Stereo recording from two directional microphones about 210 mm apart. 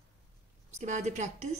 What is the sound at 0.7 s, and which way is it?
Speech, 35° right (ahead or behind).